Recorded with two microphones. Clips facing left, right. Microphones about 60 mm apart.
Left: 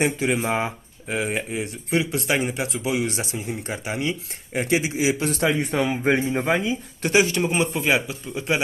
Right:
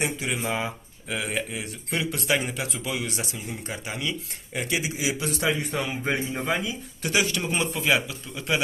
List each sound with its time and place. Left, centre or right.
0.0 s a man's voice: left
3.1 s speech: left